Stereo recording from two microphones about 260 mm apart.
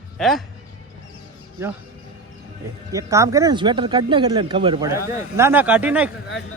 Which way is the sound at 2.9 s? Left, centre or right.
Centre.